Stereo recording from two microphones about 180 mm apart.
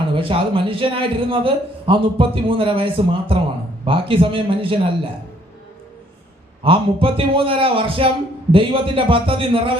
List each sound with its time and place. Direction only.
0.1 s a man's voice: 30° right (ahead or behind)
6.6 s a man's voice: 30° right (ahead or behind)